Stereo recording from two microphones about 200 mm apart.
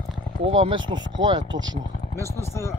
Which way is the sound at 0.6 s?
20° right (ahead or behind).